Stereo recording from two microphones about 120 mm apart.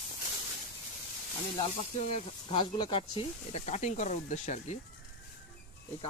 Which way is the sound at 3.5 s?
70° left (ahead or behind).